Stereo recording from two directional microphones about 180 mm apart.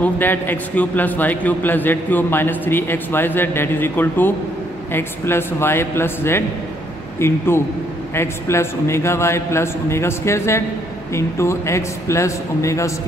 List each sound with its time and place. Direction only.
0.0 s a man's voice: 10° left (ahead or behind)